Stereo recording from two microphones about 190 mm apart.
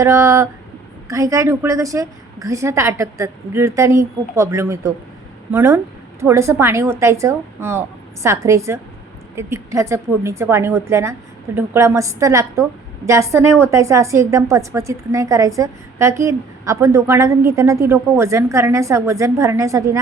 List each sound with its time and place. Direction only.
0.0 s a woman's voice: 15° right (ahead or behind)